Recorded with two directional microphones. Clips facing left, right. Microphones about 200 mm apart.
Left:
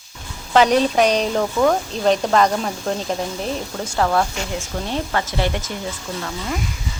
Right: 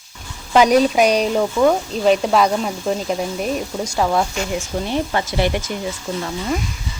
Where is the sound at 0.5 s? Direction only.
10° right (ahead or behind).